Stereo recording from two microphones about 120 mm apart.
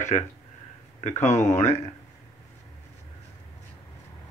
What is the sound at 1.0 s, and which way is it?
Speech, 85° left.